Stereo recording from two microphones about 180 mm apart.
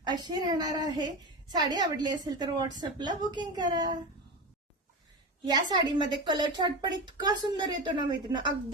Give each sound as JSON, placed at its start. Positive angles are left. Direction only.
{"t": 0.0, "sound": "a woman's voice", "side_deg": -25}
{"t": 5.5, "sound": "a woman's voice", "side_deg": -25}